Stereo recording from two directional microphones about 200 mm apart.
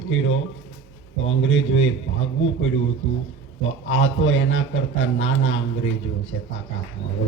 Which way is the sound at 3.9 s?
70° left (ahead or behind).